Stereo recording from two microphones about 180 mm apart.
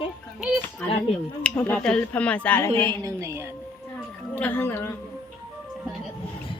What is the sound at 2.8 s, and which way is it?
Speech, 15° right (ahead or behind).